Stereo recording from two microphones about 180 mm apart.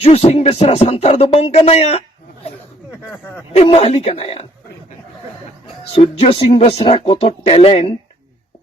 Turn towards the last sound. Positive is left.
turn(degrees=35)  # may be behind; listen again after turning